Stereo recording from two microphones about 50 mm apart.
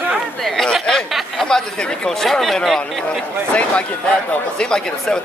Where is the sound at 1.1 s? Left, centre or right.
Centre.